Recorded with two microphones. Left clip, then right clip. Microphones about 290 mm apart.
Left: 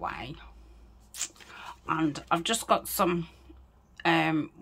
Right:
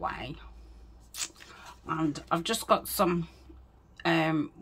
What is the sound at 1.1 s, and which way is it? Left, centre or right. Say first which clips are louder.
Speech: even; centre.